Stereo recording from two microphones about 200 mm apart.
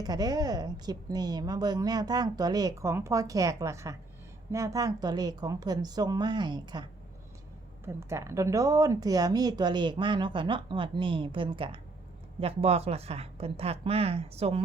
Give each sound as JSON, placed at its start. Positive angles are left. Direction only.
{"t": 0.0, "sound": "a woman's voice", "side_deg": -20}
{"t": 7.9, "sound": "a woman's voice", "side_deg": -15}